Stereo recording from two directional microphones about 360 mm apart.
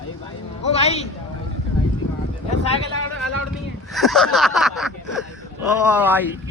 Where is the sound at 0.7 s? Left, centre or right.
Centre.